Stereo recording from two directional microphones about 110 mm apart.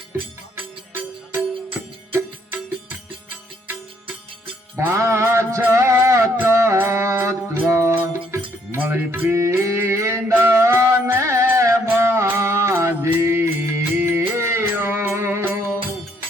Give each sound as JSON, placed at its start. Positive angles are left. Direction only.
{"t": 4.8, "sound": "music", "side_deg": -25}